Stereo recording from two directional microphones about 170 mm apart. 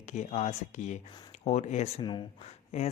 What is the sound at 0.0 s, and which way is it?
Speech, 45° left (ahead or behind).